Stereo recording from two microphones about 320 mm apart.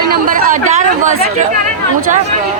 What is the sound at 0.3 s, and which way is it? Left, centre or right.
Speech, right.